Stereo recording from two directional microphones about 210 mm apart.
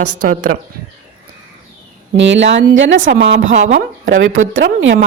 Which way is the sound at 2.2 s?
60° right (ahead or behind).